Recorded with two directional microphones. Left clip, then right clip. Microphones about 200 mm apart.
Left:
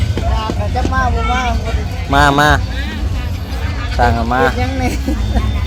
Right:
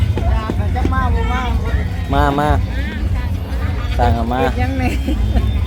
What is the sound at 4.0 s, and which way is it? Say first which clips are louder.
Speech: left 4 dB; 5° right (ahead or behind).